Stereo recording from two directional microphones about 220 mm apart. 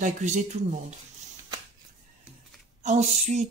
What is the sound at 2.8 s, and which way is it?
Speech, 35° right (ahead or behind).